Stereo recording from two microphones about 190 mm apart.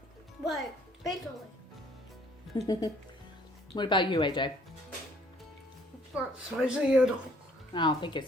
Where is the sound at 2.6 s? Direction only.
20° left (ahead or behind).